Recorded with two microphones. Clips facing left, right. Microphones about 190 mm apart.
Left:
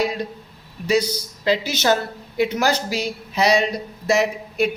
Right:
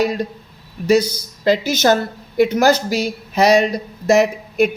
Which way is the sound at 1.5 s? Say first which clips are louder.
Right 4 dB; 45° right (ahead or behind).